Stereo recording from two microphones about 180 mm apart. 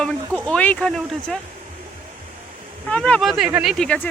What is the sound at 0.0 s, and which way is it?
Speech, 5° left (ahead or behind).